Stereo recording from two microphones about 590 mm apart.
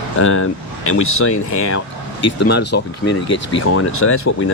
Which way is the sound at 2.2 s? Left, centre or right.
Centre.